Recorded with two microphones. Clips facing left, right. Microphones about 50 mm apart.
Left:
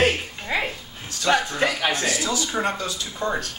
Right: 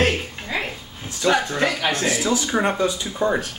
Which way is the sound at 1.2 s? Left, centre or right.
Centre.